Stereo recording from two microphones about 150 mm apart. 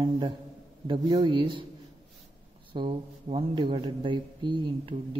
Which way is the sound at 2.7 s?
35° right (ahead or behind).